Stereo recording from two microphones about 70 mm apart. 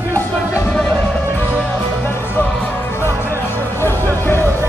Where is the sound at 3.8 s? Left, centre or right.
Left.